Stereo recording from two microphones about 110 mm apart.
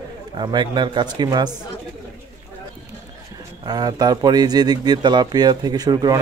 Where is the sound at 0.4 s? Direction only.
40° right (ahead or behind).